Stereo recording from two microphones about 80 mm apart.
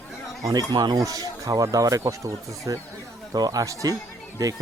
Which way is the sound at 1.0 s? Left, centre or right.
Right.